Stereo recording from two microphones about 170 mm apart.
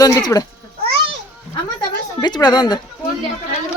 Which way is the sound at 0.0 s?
20° left (ahead or behind).